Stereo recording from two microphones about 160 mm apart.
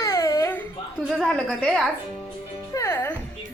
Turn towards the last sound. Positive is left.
turn(degrees=15)  # may be behind; listen again after turning